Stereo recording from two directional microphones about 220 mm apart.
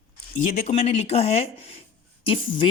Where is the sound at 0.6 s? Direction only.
30° left (ahead or behind).